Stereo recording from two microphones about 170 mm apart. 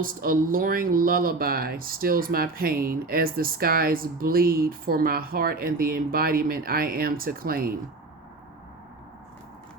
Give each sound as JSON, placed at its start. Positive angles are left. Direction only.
{"t": 0.0, "sound": "speech", "side_deg": -55}